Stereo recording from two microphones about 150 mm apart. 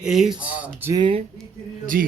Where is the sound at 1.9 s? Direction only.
90° right.